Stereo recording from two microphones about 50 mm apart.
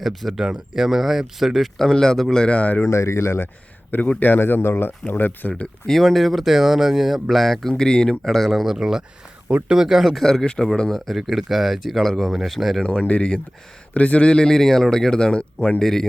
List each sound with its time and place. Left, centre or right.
0.0 s speech: centre
0.3 s speech: centre
1.8 s speech: centre
2.3 s speech: left
2.9 s speech: left
4.2 s speech: left
5.9 s speech: centre
7.7 s speech: centre
8.2 s speech: centre
12.8 s speech: left
15.8 s speech: centre